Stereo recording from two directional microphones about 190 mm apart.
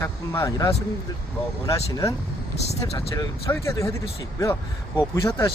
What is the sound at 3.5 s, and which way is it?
Speech, 15° left (ahead or behind).